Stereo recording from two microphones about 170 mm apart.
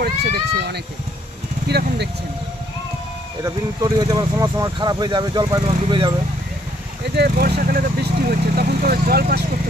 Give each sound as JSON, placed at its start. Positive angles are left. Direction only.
{"t": 0.0, "sound": "speech", "side_deg": -75}
{"t": 3.4, "sound": "speech", "side_deg": -20}
{"t": 7.2, "sound": "speech", "side_deg": -70}